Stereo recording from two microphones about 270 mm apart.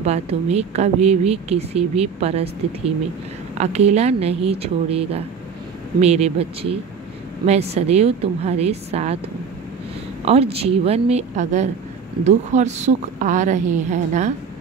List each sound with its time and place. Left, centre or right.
0.0 s speech: right
10.2 s speech: right